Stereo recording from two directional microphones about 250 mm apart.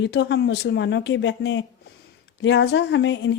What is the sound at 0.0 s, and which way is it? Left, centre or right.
Speech, left.